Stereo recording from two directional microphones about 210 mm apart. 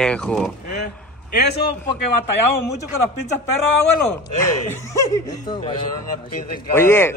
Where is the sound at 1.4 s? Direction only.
50° left (ahead or behind).